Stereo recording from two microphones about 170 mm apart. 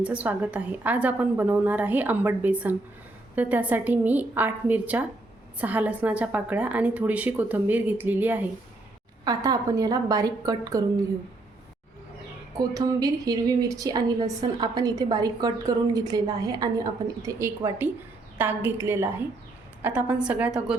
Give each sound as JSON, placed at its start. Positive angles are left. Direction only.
{"t": 0.0, "sound": "a woman's voice", "side_deg": -10}
{"t": 9.2, "sound": "a woman's voice", "side_deg": -20}
{"t": 12.5, "sound": "a woman's voice", "side_deg": -20}